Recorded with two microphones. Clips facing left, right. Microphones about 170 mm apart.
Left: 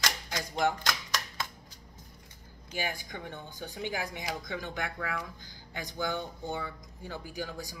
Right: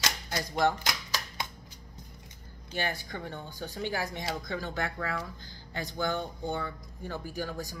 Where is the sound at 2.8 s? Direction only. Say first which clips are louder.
Right 2 dB; 15° left (ahead or behind).